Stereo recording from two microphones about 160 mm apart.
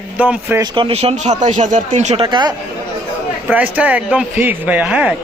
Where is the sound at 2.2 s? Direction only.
30° right (ahead or behind).